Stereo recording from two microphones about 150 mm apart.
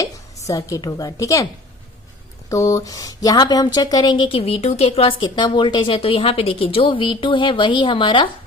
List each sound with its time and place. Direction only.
0.0 s speech: 20° left (ahead or behind)
2.5 s a woman's voice: 20° left (ahead or behind)